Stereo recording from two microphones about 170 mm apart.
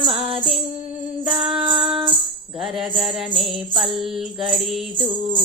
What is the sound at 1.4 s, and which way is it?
Music, 30° right (ahead or behind).